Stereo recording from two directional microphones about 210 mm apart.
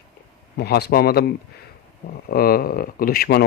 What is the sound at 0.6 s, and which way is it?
Speech, 50° left (ahead or behind).